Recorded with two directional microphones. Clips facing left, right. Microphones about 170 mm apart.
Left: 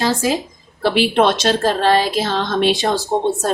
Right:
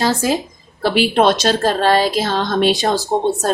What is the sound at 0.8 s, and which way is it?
A woman's voice, 40° right (ahead or behind).